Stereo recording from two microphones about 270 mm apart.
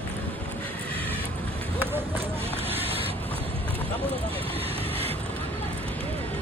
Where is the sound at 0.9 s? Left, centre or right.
Centre.